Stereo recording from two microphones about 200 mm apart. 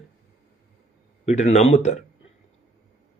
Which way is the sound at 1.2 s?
35° left (ahead or behind).